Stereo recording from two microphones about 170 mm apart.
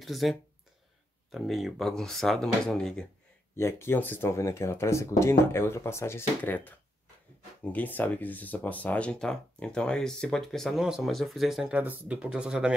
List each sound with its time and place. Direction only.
0.0 s speech: centre (ahead or behind)
3.5 s speech: 15° left (ahead or behind); by 12.7 s 5° right (ahead or behind)